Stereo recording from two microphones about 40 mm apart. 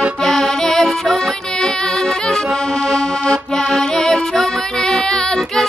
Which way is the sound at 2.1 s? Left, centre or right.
Centre.